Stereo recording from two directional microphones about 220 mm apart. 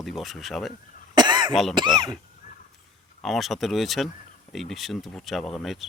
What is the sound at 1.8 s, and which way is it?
Speech, 20° right (ahead or behind).